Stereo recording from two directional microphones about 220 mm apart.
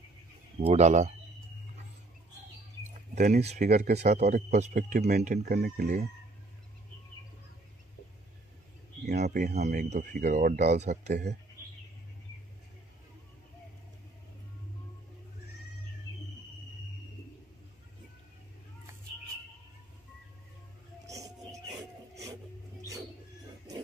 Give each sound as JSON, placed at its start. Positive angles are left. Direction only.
{"t": 0.6, "sound": "speech", "side_deg": -30}
{"t": 3.2, "sound": "speech", "side_deg": -40}
{"t": 9.0, "sound": "a sound", "side_deg": -30}
{"t": 9.5, "sound": "speech", "side_deg": -30}
{"t": 21.1, "sound": "music", "side_deg": -15}